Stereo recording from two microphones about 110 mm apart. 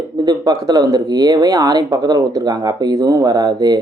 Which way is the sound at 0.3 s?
40° right (ahead or behind).